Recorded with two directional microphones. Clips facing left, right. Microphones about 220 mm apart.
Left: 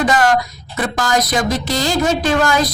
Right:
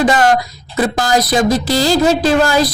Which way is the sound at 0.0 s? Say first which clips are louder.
Right 3 dB; 30° right (ahead or behind).